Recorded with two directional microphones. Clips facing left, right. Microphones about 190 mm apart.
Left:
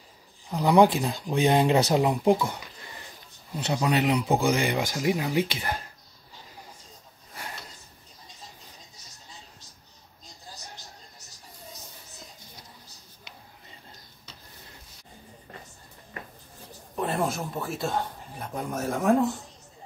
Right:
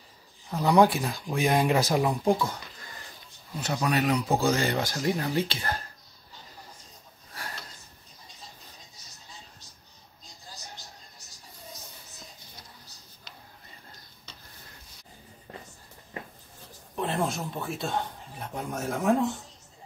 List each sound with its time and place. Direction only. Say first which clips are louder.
0.5 s speech: left 2 dB; 15° left (ahead or behind)
16.9 s speech: left 1 dB; centre (ahead or behind)